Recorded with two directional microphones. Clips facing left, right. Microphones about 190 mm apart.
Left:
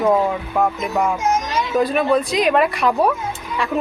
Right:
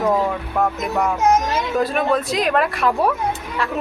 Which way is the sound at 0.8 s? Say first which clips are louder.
Even; centre (ahead or behind).